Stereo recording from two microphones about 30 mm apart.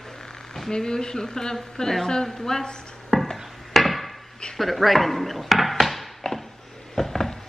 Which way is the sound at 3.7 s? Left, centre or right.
Centre.